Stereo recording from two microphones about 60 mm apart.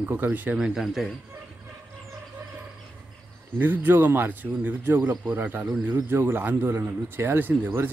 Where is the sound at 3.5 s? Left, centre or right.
Right.